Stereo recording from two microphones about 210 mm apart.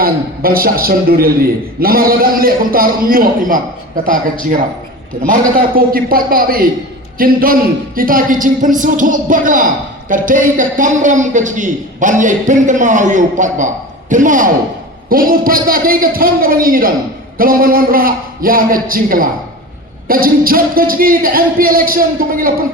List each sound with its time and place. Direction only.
0.0 s a man's voice: 45° right (ahead or behind)